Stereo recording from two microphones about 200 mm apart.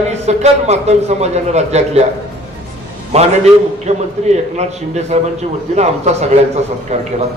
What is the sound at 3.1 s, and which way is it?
A man's voice, 30° right (ahead or behind).